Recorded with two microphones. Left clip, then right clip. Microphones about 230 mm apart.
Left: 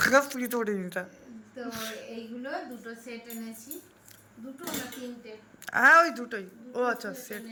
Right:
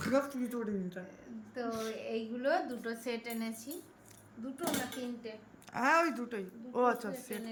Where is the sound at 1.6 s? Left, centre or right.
Centre.